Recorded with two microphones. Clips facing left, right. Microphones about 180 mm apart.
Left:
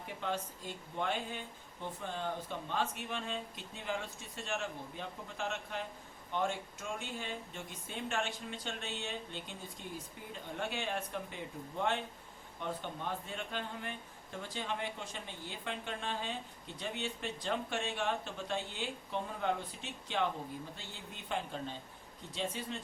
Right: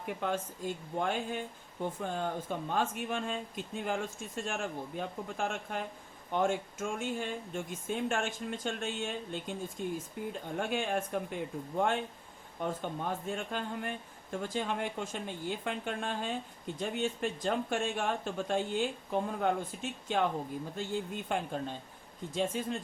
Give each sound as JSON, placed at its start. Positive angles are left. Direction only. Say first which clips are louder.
{"t": 0.0, "sound": "speech", "louder": "right 4 dB", "side_deg": -50}